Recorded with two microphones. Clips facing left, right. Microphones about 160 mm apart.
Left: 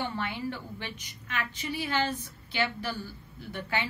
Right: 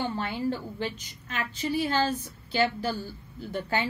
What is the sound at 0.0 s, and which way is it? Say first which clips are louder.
Speech: right 4 dB; 35° right (ahead or behind).